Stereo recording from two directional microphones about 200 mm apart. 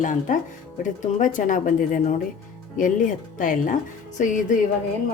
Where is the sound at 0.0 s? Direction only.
40° left (ahead or behind).